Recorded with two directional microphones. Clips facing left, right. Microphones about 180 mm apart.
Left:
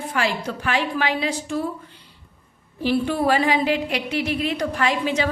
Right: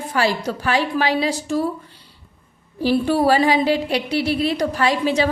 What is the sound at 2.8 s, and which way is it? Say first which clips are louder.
A woman's voice: right 4 dB; 35° right (ahead or behind).